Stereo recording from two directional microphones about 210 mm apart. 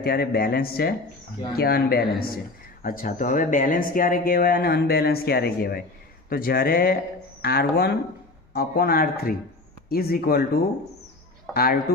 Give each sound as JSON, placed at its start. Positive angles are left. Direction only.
{"t": 0.0, "sound": "speech", "side_deg": 45}